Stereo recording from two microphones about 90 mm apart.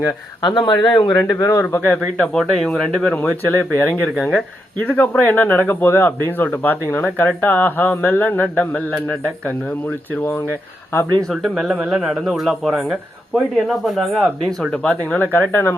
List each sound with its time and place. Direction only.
0.7 s speech: 55° left (ahead or behind)
1.3 s speech: 35° left (ahead or behind)
1.6 s speech: 20° left (ahead or behind)
2.4 s speech: centre (ahead or behind)
3.2 s speech: 20° left (ahead or behind)
11.3 s speech: centre (ahead or behind); by 15.7 s 25° left (ahead or behind)